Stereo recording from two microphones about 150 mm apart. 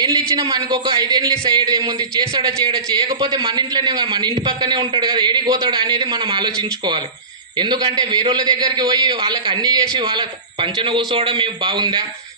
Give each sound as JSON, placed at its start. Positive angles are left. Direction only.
{"t": 0.0, "sound": "a man's voice", "side_deg": -25}